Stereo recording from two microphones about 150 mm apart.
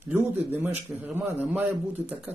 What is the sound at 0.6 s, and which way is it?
Speech, 10° right (ahead or behind).